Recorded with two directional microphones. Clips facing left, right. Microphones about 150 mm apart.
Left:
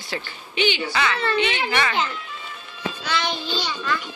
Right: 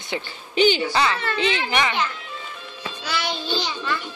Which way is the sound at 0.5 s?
40° right (ahead or behind).